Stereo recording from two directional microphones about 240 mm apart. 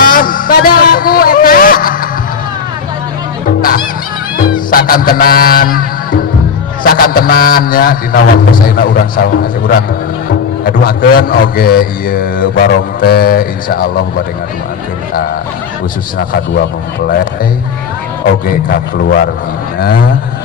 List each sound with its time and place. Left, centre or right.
0.0 s a sound: left
4.4 s music: left
6.8 s a man's voice: left
18.4 s a man's voice: left